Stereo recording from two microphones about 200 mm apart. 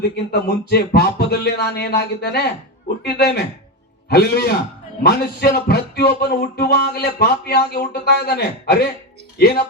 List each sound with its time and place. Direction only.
0.3 s music: 50° left (ahead or behind)